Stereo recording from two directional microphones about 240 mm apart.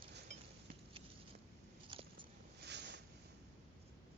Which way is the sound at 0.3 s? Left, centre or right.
Right.